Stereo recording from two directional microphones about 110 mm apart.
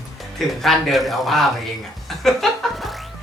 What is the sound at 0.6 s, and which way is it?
Speech, centre (ahead or behind).